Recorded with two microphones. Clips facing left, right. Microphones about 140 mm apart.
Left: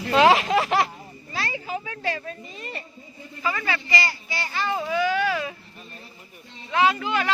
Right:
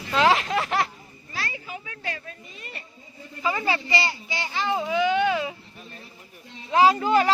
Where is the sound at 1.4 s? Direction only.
90° left.